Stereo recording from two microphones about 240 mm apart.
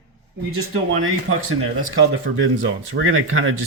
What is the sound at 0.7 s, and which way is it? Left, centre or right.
Speech, right.